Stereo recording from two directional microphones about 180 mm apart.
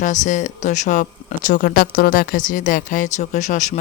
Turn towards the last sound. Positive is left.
turn(degrees=40)  # may be behind; listen again after turning